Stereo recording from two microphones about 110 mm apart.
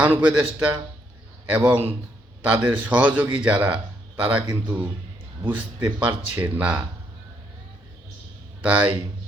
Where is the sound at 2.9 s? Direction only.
15° right (ahead or behind).